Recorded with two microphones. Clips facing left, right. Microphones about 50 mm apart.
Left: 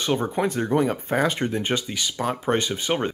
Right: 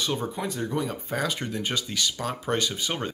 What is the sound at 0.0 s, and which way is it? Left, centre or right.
Speech, left.